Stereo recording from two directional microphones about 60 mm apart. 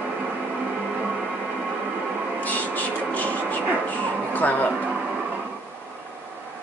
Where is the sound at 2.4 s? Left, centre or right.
Left.